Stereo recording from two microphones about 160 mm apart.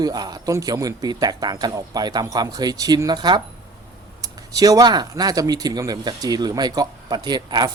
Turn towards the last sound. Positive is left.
turn(degrees=-25)  # may be behind; listen again after turning